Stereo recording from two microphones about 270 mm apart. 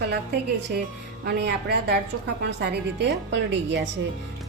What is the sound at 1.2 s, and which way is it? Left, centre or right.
A woman's voice, right.